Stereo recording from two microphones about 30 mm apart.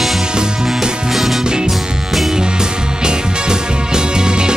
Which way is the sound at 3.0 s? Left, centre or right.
Right.